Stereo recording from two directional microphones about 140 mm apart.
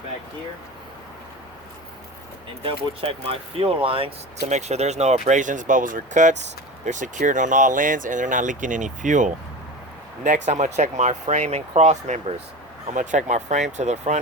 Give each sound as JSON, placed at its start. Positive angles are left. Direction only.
{"t": 2.6, "sound": "speech", "side_deg": -40}
{"t": 4.4, "sound": "speech", "side_deg": -55}